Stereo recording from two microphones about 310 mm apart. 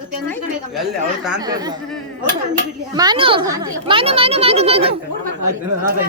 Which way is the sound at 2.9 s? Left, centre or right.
Centre.